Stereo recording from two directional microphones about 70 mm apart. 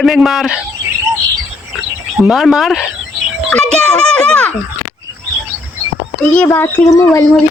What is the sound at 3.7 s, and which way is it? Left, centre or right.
Speech, centre.